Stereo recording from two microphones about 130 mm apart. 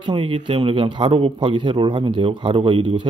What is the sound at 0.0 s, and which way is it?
Speech, 40° right (ahead or behind).